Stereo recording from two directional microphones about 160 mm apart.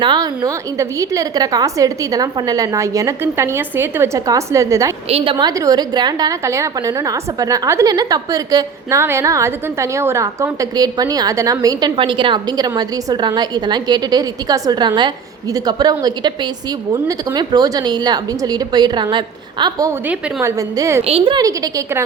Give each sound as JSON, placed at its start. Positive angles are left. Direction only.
{"t": 0.0, "sound": "a woman's voice", "side_deg": -25}
{"t": 5.0, "sound": "a woman's voice", "side_deg": -35}
{"t": 21.1, "sound": "a woman's voice", "side_deg": -35}
{"t": 21.4, "sound": "a woman's voice", "side_deg": -20}